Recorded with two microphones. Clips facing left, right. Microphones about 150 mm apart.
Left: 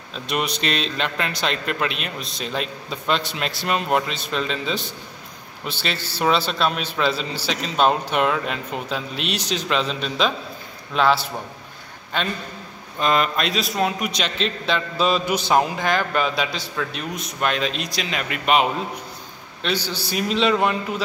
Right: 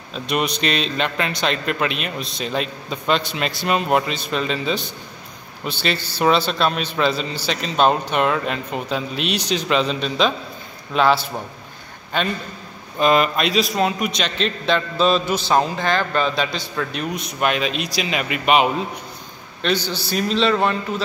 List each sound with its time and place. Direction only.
0.1 s a man's voice: centre (ahead or behind)
17.4 s speech: 10° right (ahead or behind)
19.6 s a man's voice: 10° left (ahead or behind)